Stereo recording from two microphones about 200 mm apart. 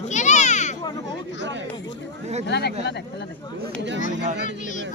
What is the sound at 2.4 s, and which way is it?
Speech, 60° left (ahead or behind).